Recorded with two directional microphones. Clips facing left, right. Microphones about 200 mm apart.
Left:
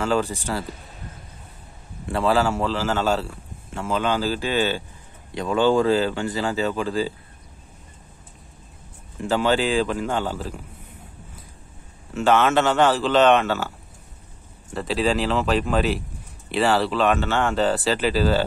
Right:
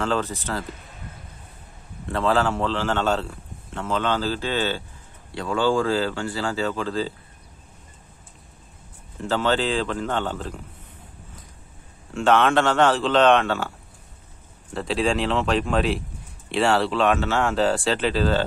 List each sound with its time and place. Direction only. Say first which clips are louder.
0.0 s speech: left 2 dB; 10° left (ahead or behind)
2.0 s speech: left 1 dB; 10° left (ahead or behind)
9.2 s speech: left 2 dB; 15° left (ahead or behind)
12.1 s speech: even; 5° left (ahead or behind)